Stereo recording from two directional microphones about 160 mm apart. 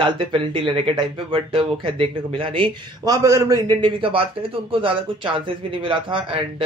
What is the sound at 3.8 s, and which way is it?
Speech, 35° right (ahead or behind).